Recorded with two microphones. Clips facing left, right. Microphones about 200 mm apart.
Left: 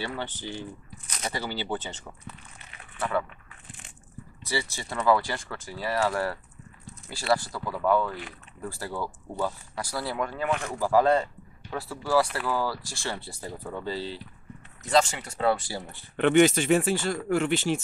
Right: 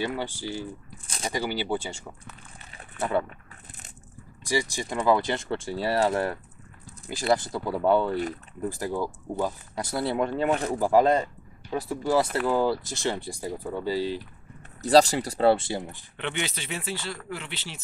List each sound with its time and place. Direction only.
0.0 s speech: 10° right (ahead or behind)
1.0 s a sound: 30° right (ahead or behind)
1.3 s speech: 15° right (ahead or behind)
3.0 s speech: 25° right (ahead or behind)
3.6 s crushing: 40° right (ahead or behind)
4.5 s speech: 15° right (ahead or behind)
8.6 s speech: 15° right (ahead or behind); by 10.9 s 35° right (ahead or behind)
10.9 s speech: 20° right (ahead or behind)
14.8 s speech: 35° right (ahead or behind)
16.2 s speech: 45° left (ahead or behind)